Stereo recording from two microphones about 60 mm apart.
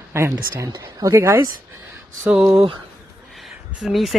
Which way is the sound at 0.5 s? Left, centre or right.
Right.